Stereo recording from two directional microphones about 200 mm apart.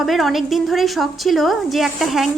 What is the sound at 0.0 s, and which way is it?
A woman's voice, centre (ahead or behind).